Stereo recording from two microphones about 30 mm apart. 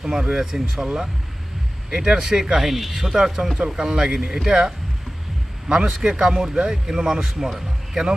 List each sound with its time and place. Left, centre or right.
0.0 s speech: centre
1.9 s speech: right